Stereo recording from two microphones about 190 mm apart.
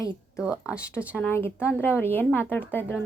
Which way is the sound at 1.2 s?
10° left (ahead or behind).